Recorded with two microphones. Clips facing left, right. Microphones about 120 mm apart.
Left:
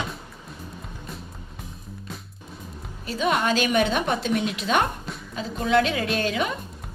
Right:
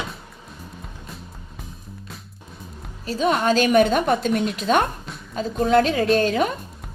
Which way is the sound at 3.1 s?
40° right (ahead or behind).